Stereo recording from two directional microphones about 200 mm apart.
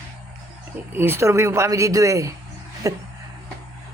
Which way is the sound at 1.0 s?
10° right (ahead or behind).